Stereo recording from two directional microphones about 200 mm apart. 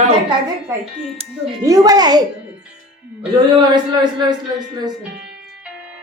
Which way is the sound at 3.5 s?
20° right (ahead or behind).